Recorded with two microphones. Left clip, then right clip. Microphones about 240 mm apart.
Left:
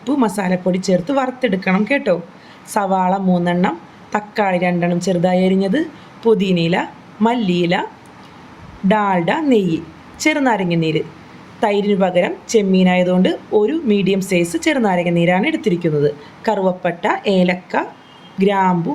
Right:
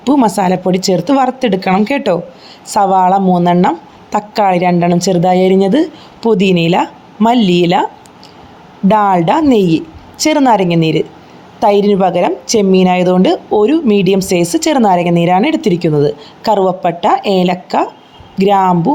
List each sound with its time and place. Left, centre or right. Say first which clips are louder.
0.0 s a woman's voice: right 7 dB; right
8.9 s a woman's voice: right 6 dB; right